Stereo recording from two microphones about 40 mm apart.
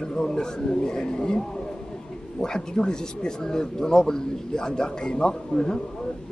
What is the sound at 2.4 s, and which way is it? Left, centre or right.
A man's voice, centre.